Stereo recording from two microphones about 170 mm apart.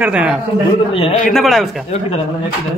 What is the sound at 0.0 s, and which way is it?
A man's voice, 5° right (ahead or behind).